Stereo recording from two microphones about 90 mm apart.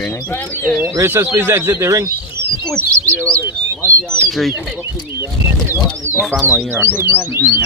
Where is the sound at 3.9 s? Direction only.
30° right (ahead or behind).